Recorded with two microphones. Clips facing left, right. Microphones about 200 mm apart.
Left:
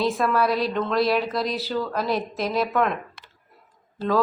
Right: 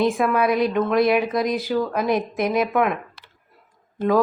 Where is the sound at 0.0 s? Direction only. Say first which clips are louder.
Right 3 dB; 15° right (ahead or behind).